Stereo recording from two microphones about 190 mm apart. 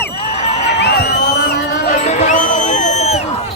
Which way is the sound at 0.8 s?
60° left (ahead or behind).